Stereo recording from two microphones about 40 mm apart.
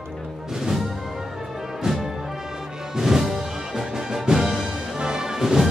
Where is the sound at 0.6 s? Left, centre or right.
Centre.